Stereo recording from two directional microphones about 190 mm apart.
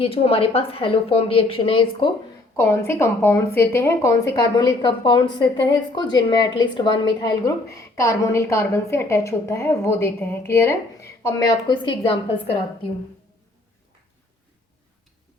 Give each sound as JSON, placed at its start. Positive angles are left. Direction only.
{"t": 0.0, "sound": "a woman's voice", "side_deg": 30}
{"t": 2.6, "sound": "a woman's voice", "side_deg": 10}